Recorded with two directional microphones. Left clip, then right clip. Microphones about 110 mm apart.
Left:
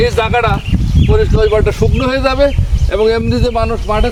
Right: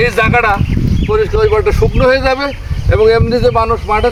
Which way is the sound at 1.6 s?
20° left (ahead or behind).